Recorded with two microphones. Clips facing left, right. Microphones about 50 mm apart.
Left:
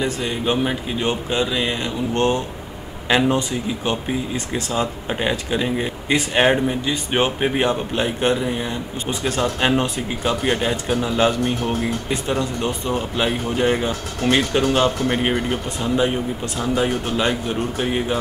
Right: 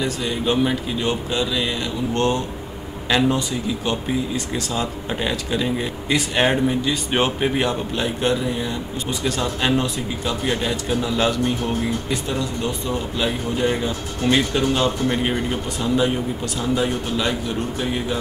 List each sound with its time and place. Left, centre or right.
0.0 s speech: centre